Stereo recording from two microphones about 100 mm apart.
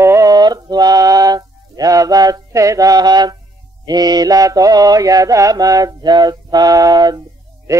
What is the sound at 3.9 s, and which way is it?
Mantra, 40° right (ahead or behind).